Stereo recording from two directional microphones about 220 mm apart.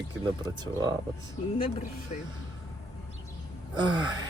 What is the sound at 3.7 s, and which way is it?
Speech, 20° right (ahead or behind).